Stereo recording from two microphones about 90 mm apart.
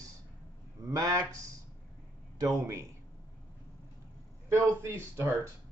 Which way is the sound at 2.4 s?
35° right (ahead or behind).